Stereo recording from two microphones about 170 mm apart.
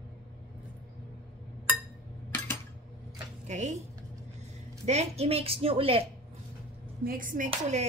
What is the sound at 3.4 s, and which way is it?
Speech, 45° right (ahead or behind).